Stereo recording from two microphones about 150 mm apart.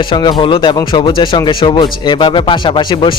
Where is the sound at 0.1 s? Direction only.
30° left (ahead or behind).